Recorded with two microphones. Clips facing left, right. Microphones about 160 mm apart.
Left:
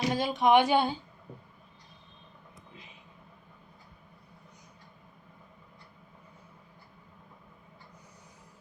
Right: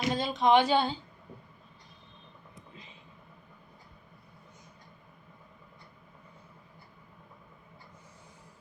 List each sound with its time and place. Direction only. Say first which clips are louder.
0.1 s speech: even; 15° left (ahead or behind)